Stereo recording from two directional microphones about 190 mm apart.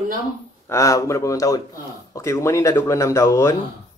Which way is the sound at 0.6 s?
15° left (ahead or behind).